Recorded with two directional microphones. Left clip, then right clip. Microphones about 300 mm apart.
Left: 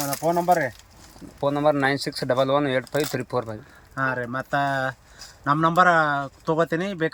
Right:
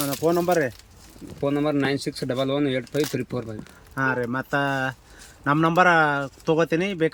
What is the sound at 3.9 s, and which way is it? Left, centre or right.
A man's voice, centre.